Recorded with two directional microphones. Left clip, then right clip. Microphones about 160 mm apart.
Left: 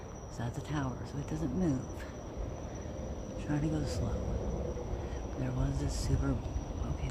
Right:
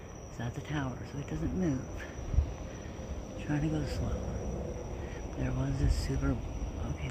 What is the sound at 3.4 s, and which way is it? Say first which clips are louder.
Speech: right 1 dB; 15° right (ahead or behind).